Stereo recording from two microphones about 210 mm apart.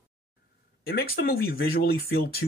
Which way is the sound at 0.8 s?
45° left (ahead or behind).